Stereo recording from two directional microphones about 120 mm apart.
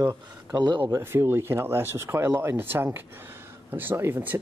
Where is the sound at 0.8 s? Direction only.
20° right (ahead or behind).